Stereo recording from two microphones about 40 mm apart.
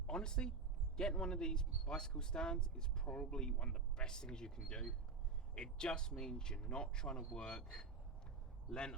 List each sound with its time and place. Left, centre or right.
0.1 s speech: left
3.1 s speech: left
3.3 s speech: left